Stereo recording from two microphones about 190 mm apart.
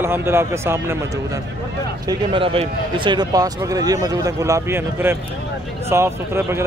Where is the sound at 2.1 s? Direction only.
25° right (ahead or behind).